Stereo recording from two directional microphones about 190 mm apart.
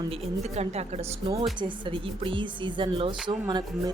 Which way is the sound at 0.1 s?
35° right (ahead or behind).